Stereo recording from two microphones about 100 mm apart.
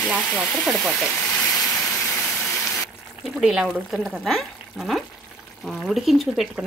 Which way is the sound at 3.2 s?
Centre (ahead or behind).